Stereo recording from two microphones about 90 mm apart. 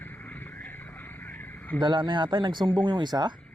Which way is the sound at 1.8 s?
60° right (ahead or behind).